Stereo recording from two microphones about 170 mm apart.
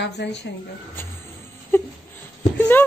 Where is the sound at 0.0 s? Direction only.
90° left.